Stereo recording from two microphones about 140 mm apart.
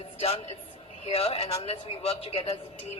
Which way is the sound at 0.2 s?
45° left (ahead or behind).